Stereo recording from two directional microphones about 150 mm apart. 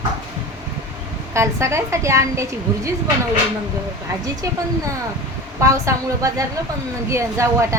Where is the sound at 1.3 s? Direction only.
20° right (ahead or behind).